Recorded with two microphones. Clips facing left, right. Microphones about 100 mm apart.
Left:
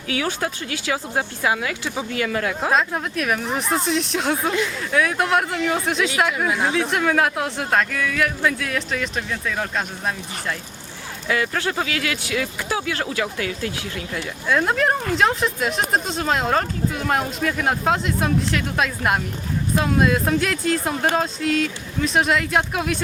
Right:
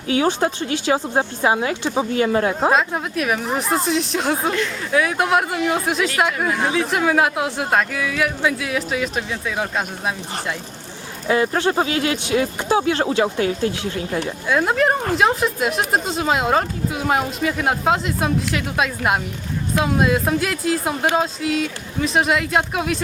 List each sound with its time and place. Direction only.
0.1 s speech: 30° right (ahead or behind)
2.7 s speech: centre (ahead or behind)
11.3 s speech: 30° right (ahead or behind)
14.4 s speech: 5° right (ahead or behind)